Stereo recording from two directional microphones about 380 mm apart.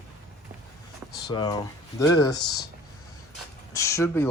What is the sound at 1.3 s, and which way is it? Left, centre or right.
Speech, centre.